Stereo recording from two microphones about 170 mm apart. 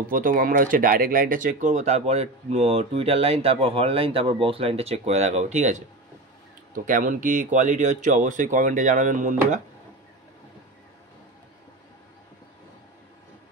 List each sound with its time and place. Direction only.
0.1 s speech: 55° right (ahead or behind)